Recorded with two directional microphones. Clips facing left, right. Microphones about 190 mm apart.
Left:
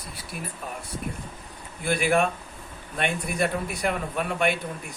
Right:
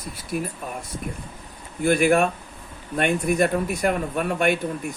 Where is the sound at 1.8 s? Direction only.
45° right (ahead or behind).